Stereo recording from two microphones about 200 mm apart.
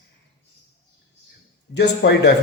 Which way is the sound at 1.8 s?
55° left (ahead or behind).